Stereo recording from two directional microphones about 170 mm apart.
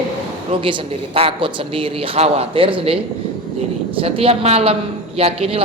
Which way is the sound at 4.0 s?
35° right (ahead or behind).